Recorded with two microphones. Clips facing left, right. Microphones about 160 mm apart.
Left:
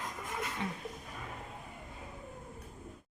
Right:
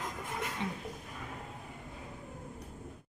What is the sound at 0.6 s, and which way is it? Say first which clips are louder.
Speech: right 2 dB; 20° right (ahead or behind).